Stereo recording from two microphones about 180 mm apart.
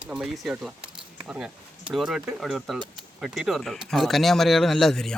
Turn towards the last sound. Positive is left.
turn(degrees=0)  # may be behind; listen again after turning